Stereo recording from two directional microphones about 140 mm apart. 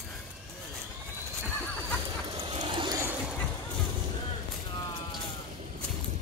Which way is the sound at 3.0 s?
15° right (ahead or behind).